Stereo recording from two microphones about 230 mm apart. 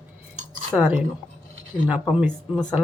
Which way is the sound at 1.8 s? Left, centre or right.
Centre.